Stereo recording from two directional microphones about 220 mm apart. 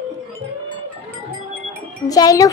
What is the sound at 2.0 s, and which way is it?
Speech, 15° left (ahead or behind).